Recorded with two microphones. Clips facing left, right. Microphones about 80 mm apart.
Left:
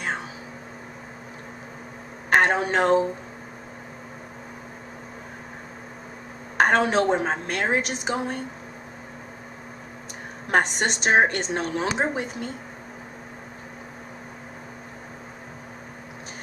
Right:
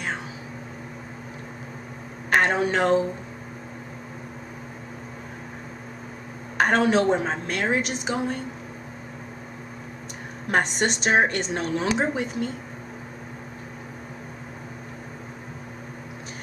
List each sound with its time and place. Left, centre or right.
2.2 s a woman's voice: left
6.6 s a woman's voice: left
10.6 s a woman's voice: left